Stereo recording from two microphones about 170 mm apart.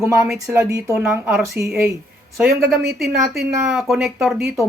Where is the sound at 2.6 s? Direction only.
65° right (ahead or behind).